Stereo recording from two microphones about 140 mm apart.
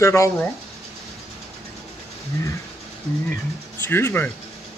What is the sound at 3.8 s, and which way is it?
Speech, 15° left (ahead or behind).